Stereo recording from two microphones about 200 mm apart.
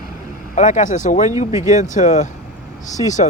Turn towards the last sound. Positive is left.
turn(degrees=35)  # may be behind; listen again after turning